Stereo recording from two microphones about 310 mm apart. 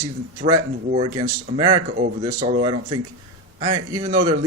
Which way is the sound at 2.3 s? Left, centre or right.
Centre.